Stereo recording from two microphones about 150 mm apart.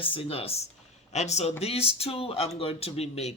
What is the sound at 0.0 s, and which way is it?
Speech, 40° left (ahead or behind).